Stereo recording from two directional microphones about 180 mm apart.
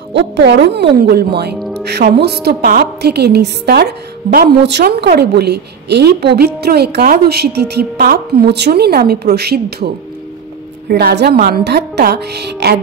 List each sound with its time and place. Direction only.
0.1 s speech: 75° right (ahead or behind)
0.9 s a woman's voice: 60° right (ahead or behind)
10.9 s a woman's voice: 60° right (ahead or behind)